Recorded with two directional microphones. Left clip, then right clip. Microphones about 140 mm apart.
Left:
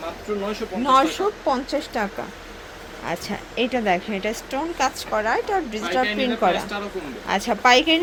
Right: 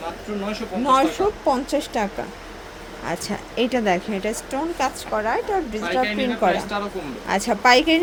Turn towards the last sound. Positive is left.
turn(degrees=-15)  # may be behind; listen again after turning